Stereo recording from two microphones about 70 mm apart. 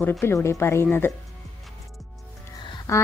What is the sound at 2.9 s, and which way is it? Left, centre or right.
Speech, left.